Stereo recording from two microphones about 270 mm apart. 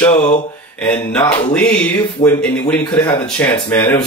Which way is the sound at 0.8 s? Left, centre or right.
Centre.